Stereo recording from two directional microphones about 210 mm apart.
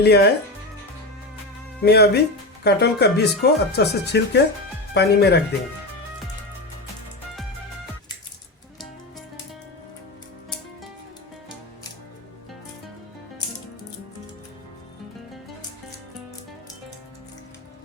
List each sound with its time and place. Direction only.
0.0 s speech: 50° left (ahead or behind)
1.8 s speech: 50° left (ahead or behind)